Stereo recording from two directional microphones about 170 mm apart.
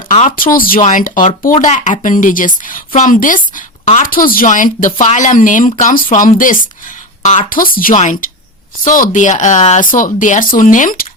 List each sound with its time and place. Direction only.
0.1 s speech: 40° left (ahead or behind)
0.3 s a woman's voice: 55° left (ahead or behind)